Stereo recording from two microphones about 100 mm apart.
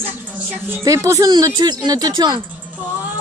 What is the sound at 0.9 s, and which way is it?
Speech, 30° right (ahead or behind).